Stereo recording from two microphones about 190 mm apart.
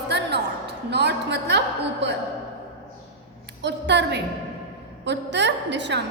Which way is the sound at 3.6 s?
65° right (ahead or behind).